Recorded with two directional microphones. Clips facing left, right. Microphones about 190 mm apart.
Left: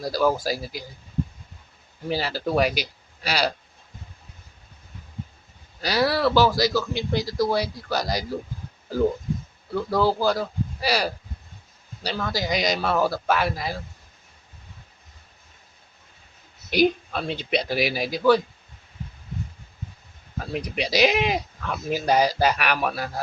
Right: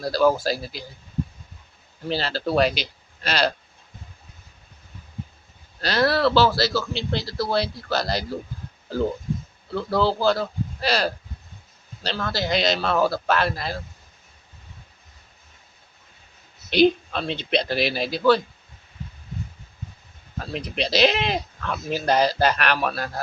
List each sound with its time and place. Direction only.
0.0 s speech: 15° left (ahead or behind)
2.0 s speech: 10° left (ahead or behind)
5.8 s speech: 10° left (ahead or behind)
9.7 s speech: 10° left (ahead or behind)
16.6 s speech: 10° left (ahead or behind)
20.5 s speech: 10° left (ahead or behind)